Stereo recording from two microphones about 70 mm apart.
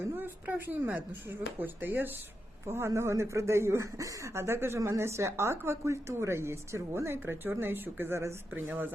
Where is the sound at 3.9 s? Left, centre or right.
Right.